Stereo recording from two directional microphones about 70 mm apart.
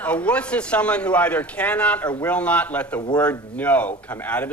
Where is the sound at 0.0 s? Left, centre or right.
Centre.